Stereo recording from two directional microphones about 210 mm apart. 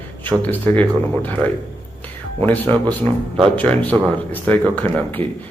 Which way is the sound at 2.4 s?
10° left (ahead or behind).